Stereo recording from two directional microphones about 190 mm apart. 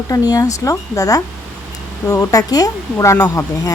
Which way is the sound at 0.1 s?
20° left (ahead or behind).